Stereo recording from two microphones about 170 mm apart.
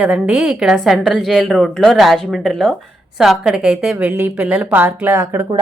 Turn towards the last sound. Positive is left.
turn(degrees=-15)  # may be behind; listen again after turning